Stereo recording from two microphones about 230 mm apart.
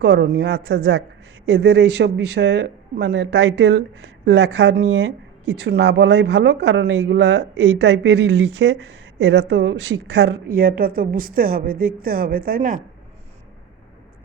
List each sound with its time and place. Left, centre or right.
0.0 s speech: right